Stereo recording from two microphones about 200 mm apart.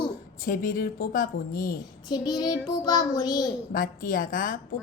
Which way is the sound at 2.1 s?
20° left (ahead or behind).